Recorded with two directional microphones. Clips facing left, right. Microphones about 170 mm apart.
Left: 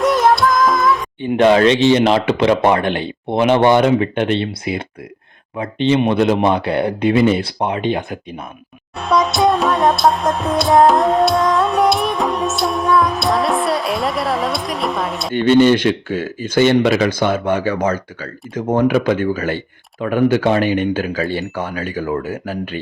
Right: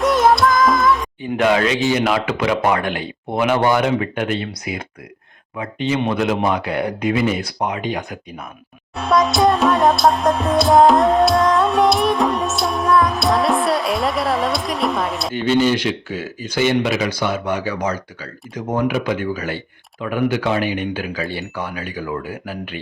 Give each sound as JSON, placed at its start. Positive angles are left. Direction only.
{"t": 0.0, "sound": "music", "side_deg": 0}
{"t": 1.2, "sound": "speech", "side_deg": 30}
{"t": 9.0, "sound": "music", "side_deg": 0}
{"t": 15.4, "sound": "speech", "side_deg": 55}